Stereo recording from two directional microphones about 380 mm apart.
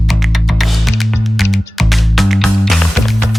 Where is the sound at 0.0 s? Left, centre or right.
Centre.